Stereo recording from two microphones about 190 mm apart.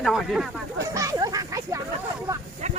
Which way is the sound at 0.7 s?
15° right (ahead or behind).